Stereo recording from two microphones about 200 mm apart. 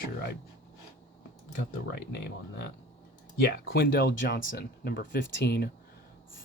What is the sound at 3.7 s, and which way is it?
Speech, 55° left (ahead or behind).